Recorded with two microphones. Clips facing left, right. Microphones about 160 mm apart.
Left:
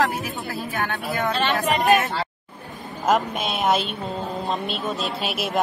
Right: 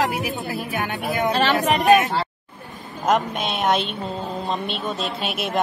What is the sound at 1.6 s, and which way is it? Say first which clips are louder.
Speech: right 3 dB; 40° right (ahead or behind).